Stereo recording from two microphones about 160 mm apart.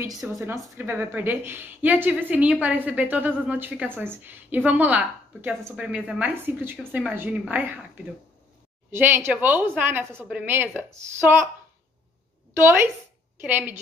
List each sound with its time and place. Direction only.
0.2 s a woman's voice: 10° right (ahead or behind)
8.9 s a woman's voice: 15° right (ahead or behind)
12.5 s a woman's voice: 15° right (ahead or behind)